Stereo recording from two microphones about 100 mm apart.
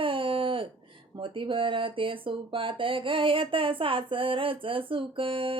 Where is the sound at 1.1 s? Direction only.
60° right (ahead or behind).